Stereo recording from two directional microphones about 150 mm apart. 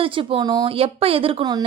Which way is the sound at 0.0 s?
35° right (ahead or behind).